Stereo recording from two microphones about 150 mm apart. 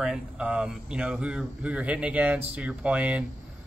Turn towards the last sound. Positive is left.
turn(degrees=-10)  # may be behind; listen again after turning